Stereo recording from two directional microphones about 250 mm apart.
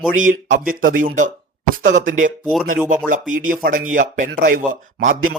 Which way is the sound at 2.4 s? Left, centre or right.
Centre.